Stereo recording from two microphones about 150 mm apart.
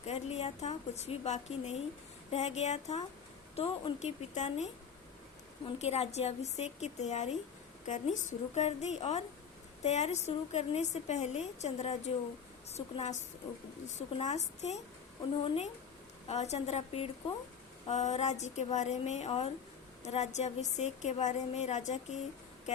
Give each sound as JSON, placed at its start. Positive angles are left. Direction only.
{"t": 0.0, "sound": "a woman's voice", "side_deg": 45}
{"t": 5.8, "sound": "a woman's voice", "side_deg": 45}